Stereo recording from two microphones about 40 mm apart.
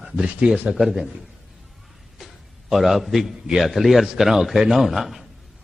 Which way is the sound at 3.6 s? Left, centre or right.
Centre.